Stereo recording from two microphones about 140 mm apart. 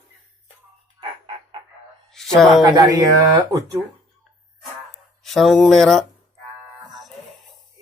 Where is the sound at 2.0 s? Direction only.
5° left (ahead or behind).